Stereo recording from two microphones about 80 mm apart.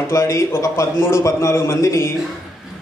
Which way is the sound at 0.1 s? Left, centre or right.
Left.